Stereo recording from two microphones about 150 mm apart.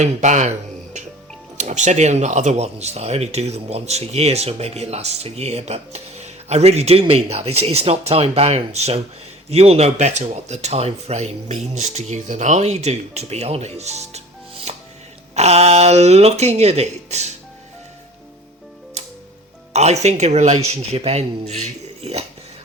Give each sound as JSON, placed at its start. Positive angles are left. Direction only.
{"t": 0.0, "sound": "speech", "side_deg": -50}
{"t": 1.5, "sound": "speech", "side_deg": -50}
{"t": 14.7, "sound": "music", "side_deg": -45}
{"t": 15.4, "sound": "speech", "side_deg": -45}
{"t": 19.0, "sound": "music", "side_deg": -50}
{"t": 19.7, "sound": "speech", "side_deg": -45}